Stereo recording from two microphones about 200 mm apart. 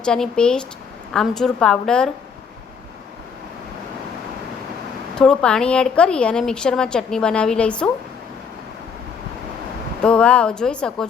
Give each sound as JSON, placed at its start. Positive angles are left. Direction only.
{"t": 0.0, "sound": "a woman's voice", "side_deg": 5}
{"t": 5.1, "sound": "a woman's voice", "side_deg": 5}
{"t": 10.0, "sound": "a woman's voice", "side_deg": 5}